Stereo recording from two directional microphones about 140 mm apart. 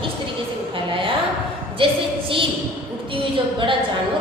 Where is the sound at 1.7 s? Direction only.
40° right (ahead or behind).